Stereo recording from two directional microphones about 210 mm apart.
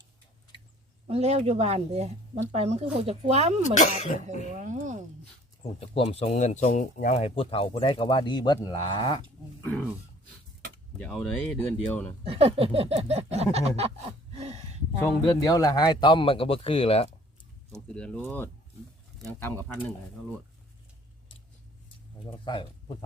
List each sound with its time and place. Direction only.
1.0 s speech: 30° right (ahead or behind)
3.8 s speech: 40° left (ahead or behind)
4.5 s speech: 35° right (ahead or behind)
5.8 s speech: 25° left (ahead or behind)
10.9 s speech: 5° left (ahead or behind)
12.2 s a sound: 25° right (ahead or behind)
15.0 s speech: 15° left (ahead or behind)
17.7 s speech: 5° left (ahead or behind)
22.4 s speech: 20° left (ahead or behind)